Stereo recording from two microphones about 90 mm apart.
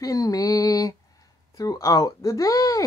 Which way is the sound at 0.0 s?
40° left (ahead or behind).